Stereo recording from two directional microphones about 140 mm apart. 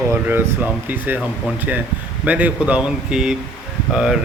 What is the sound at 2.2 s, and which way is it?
Speech, 10° right (ahead or behind).